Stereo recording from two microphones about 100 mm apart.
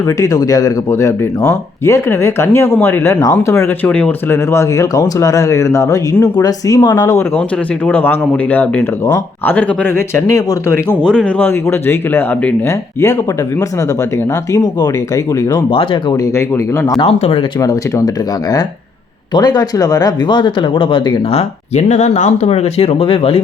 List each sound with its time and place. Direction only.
0.2 s speech: 35° left (ahead or behind)
3.8 s speech: 10° left (ahead or behind)
4.3 s speech: 30° left (ahead or behind)
7.9 s speech: 20° left (ahead or behind)
11.0 s speech: 10° left (ahead or behind)
11.3 s speech: 25° left (ahead or behind)
14.5 s speech: 40° left (ahead or behind)
15.7 s speech: 60° left (ahead or behind)
16.2 s speech: 30° left (ahead or behind)
17.0 s speech: 75° left (ahead or behind)
17.6 s speech: 35° left (ahead or behind)
19.3 s speech: 40° left (ahead or behind); by 21.4 s 60° left (ahead or behind)
22.0 s speech: 90° left; by 23.4 s 65° left (ahead or behind)